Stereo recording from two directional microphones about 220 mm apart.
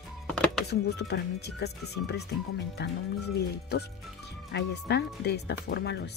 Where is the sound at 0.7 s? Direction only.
50° left (ahead or behind).